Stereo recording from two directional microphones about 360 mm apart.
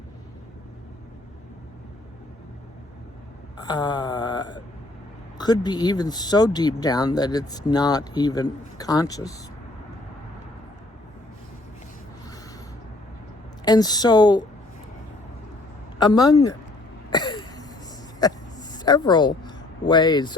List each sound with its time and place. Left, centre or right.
3.6 s speech: centre
13.7 s speech: centre
16.0 s speech: centre
17.1 s a sound: centre
18.2 s speech: centre